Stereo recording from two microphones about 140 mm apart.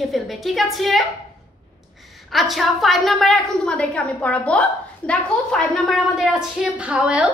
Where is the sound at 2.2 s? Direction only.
Centre (ahead or behind).